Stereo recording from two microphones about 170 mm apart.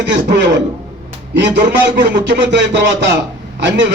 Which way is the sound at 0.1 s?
90° right.